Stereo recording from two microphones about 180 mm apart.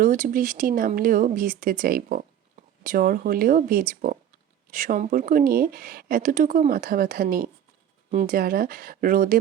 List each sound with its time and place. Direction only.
0.0 s speech: 50° right (ahead or behind)